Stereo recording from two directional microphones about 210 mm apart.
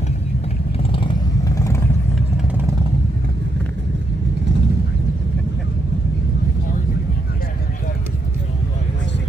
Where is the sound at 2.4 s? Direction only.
10° right (ahead or behind).